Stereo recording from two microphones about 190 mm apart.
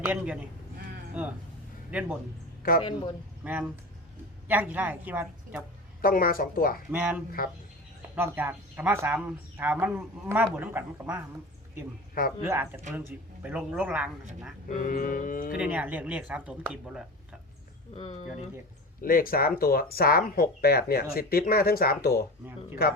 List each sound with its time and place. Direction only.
0.0 s a man's voice: 10° right (ahead or behind)
2.8 s speech: 25° left (ahead or behind)
3.4 s speech: 5° right (ahead or behind)
6.0 s speech: 50° left (ahead or behind)
6.9 s speech: 5° right (ahead or behind)
7.4 s speech: 50° left (ahead or behind)
8.1 s speech: 10° right (ahead or behind)
12.5 s speech: 15° right (ahead or behind)
14.7 s speech: 40° left (ahead or behind)
15.5 s speech: 5° right (ahead or behind)
17.9 s speech: 30° left (ahead or behind)
19.0 s speech: 50° left (ahead or behind)